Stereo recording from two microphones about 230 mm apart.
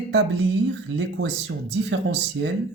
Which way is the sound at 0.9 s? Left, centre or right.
Right.